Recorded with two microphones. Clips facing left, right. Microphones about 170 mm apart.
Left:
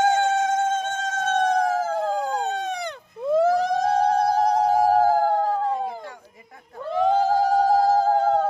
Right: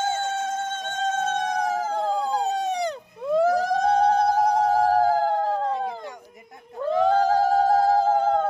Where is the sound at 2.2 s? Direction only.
35° right (ahead or behind).